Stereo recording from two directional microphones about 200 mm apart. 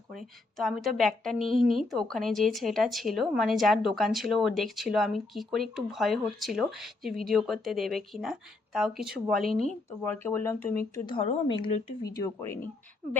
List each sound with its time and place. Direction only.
0.5 s a woman's voice: centre (ahead or behind)
11.0 s a woman's voice: 25° left (ahead or behind)
12.0 s speech: 15° left (ahead or behind)